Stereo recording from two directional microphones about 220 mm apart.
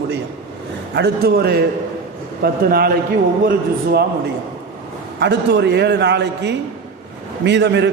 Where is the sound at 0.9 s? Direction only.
45° right (ahead or behind).